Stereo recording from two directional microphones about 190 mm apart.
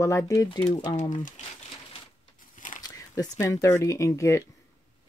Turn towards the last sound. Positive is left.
turn(degrees=15)  # may be behind; listen again after turning